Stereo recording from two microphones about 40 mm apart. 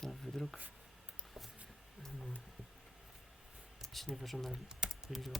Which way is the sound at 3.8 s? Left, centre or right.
Centre.